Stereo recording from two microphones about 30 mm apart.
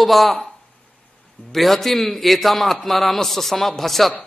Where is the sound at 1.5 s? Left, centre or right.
Centre.